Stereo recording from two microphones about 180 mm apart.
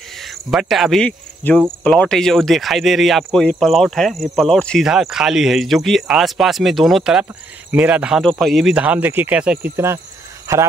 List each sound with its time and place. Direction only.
0.2 s cricket: centre (ahead or behind)
1.8 s speech: 5° left (ahead or behind); by 10.6 s 15° right (ahead or behind)